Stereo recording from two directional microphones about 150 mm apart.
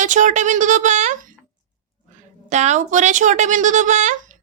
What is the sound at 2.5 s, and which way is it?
Speech, 50° right (ahead or behind).